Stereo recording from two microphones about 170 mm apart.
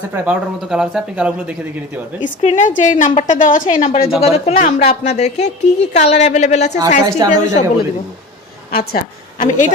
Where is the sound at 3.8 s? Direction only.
35° left (ahead or behind).